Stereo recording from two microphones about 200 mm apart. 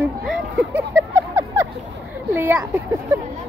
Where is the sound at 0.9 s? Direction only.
15° right (ahead or behind).